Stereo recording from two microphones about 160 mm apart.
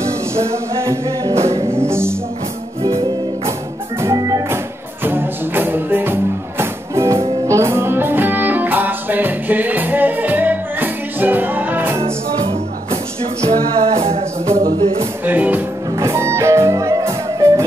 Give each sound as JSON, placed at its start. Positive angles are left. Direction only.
{"t": 0.4, "sound": "music", "side_deg": -20}
{"t": 4.0, "sound": "music", "side_deg": -20}
{"t": 12.0, "sound": "music", "side_deg": -35}
{"t": 15.2, "sound": "music", "side_deg": -10}